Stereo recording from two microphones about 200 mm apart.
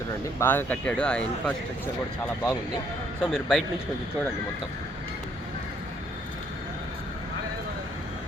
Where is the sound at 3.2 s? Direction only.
Centre (ahead or behind).